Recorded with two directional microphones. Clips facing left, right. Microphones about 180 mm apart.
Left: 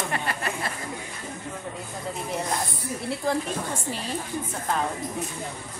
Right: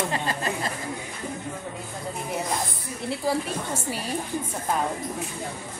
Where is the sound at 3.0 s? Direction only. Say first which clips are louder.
Right 1 dB; 5° right (ahead or behind).